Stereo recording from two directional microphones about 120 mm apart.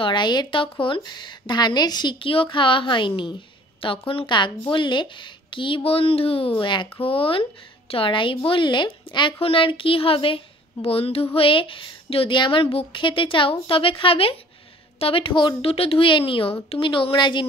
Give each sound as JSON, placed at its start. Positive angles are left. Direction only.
{"t": 0.0, "sound": "a woman's voice", "side_deg": 40}